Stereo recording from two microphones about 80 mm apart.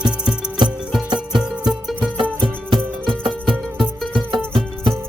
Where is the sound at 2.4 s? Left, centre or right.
Right.